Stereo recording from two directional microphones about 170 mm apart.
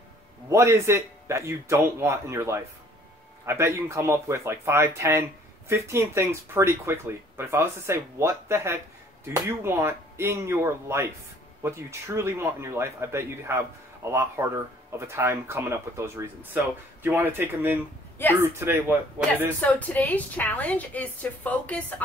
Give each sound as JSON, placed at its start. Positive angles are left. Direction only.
{"t": 0.5, "sound": "speech", "side_deg": -15}
{"t": 19.6, "sound": "a woman's voice", "side_deg": 10}